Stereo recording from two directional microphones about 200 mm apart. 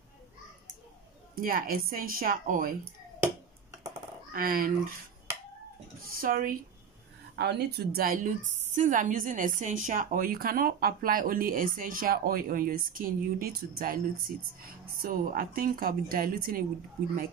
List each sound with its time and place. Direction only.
1.3 s a woman's voice: 45° right (ahead or behind)
4.3 s speech: 45° right (ahead or behind)
6.0 s a woman's voice: 45° right (ahead or behind)
7.3 s a woman's voice: 55° right (ahead or behind)